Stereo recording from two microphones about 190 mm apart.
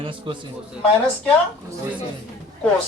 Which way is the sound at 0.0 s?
25° right (ahead or behind).